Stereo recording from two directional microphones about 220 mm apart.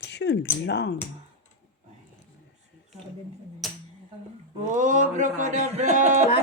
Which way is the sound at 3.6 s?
Centre (ahead or behind).